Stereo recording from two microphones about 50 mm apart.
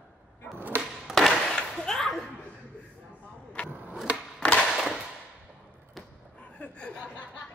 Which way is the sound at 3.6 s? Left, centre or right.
Left.